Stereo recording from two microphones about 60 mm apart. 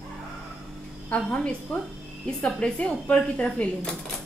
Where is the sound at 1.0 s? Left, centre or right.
Centre.